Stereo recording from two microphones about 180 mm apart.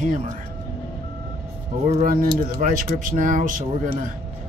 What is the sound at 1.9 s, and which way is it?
Speech, 45° right (ahead or behind).